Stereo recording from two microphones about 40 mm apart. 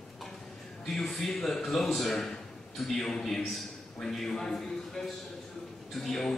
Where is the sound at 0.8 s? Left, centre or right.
Centre.